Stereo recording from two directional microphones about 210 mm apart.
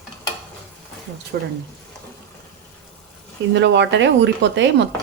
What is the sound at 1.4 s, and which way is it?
Speech, 50° right (ahead or behind).